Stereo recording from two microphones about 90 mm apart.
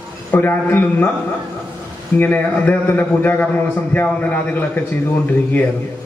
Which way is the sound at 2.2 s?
20° left (ahead or behind).